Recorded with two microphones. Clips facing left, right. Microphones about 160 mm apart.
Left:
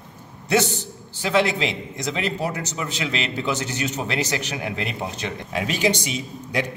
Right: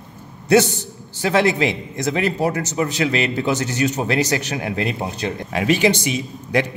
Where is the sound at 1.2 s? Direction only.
50° right (ahead or behind).